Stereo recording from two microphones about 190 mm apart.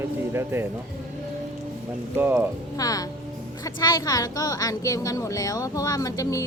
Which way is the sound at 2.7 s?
20° left (ahead or behind).